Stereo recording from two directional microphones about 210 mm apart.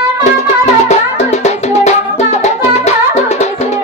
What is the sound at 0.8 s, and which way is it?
Music, 30° left (ahead or behind).